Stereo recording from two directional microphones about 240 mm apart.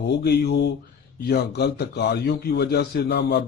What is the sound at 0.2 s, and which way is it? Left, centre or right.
A man's voice, left.